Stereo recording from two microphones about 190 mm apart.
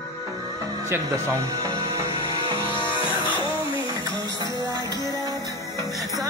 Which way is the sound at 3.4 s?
25° left (ahead or behind).